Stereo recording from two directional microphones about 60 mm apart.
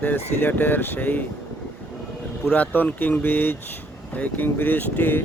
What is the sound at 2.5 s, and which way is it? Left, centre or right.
Speech, left.